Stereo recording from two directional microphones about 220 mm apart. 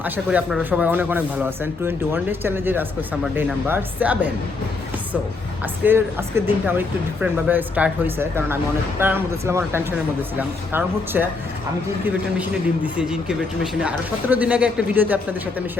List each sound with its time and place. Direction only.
0.0 s speech: 5° right (ahead or behind)
5.8 s a man's voice: 10° right (ahead or behind)